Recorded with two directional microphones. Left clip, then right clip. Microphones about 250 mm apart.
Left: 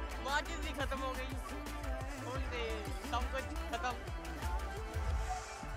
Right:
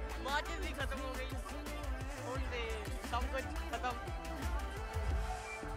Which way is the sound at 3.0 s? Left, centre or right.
Centre.